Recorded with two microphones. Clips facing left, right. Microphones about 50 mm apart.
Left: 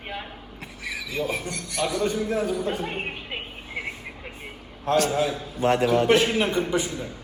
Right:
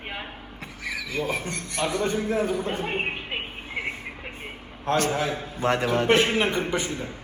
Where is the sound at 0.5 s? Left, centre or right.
Right.